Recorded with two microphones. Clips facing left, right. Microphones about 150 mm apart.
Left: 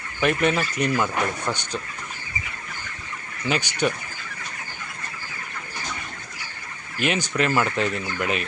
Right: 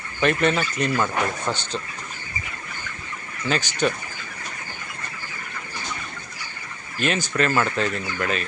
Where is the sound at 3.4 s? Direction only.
15° left (ahead or behind).